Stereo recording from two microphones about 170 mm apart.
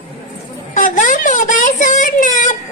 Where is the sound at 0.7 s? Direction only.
50° left (ahead or behind).